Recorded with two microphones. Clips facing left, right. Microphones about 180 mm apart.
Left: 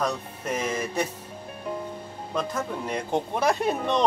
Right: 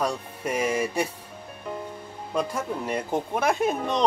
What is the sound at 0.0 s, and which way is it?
Speech, 10° right (ahead or behind).